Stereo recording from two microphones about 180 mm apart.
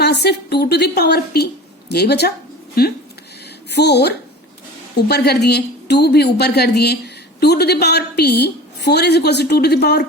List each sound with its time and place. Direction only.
0.0 s speech: 65° left (ahead or behind)